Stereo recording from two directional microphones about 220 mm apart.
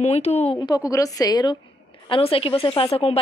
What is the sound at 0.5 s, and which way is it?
Speech, 15° left (ahead or behind).